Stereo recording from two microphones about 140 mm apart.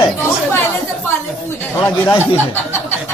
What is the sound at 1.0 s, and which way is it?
Speech, 15° left (ahead or behind).